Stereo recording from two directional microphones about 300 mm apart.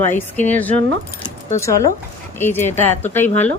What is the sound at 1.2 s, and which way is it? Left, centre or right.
Keys jangling, centre.